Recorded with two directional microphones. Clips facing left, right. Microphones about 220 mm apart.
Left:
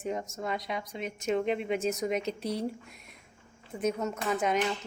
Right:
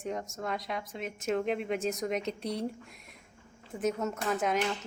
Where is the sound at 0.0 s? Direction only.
Centre (ahead or behind).